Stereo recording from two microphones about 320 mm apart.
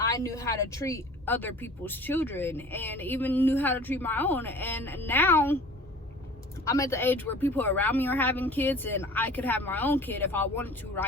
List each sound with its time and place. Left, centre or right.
0.0 s a woman's voice: centre
6.7 s a woman's voice: centre